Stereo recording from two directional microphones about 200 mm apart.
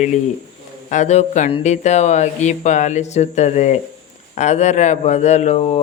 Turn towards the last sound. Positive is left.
turn(degrees=35)  # may be behind; listen again after turning